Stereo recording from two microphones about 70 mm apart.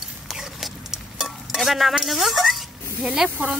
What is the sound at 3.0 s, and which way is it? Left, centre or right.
Speech, centre.